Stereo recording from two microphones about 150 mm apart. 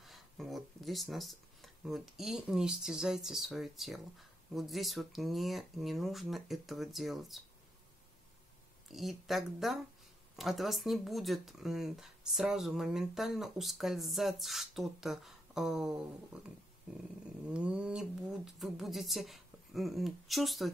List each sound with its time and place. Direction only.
0.0 s speech: centre (ahead or behind)
8.9 s speech: centre (ahead or behind)
17.5 s speech: 5° right (ahead or behind)